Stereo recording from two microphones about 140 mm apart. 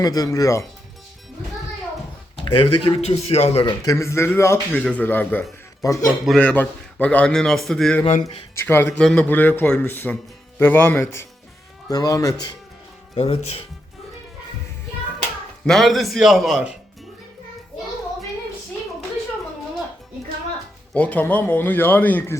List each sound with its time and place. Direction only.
0.0 s speech: 25° left (ahead or behind)
2.3 s speech: 35° left (ahead or behind)
3.7 s speech: 25° left (ahead or behind)
5.8 s speech: 25° left (ahead or behind)
6.2 s a man's voice: 5° left (ahead or behind)
8.5 s speech: 15° left (ahead or behind)
8.9 s speech: 5° left (ahead or behind); by 12.5 s 25° left (ahead or behind)
13.1 s speech: 45° left (ahead or behind)
15.6 s a man's voice: centre (ahead or behind)
20.9 s speech: 10° left (ahead or behind)